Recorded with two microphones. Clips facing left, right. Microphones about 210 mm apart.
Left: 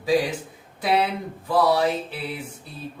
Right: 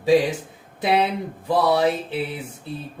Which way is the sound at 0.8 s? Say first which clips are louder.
Right 2 dB; 25° right (ahead or behind).